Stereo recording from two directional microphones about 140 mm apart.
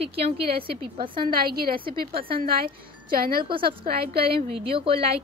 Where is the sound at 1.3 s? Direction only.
90° right.